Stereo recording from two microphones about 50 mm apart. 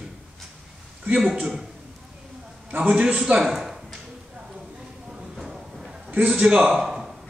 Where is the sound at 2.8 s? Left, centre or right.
Right.